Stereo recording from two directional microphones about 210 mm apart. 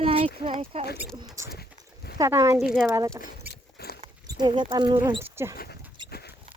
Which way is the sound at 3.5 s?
50° left (ahead or behind).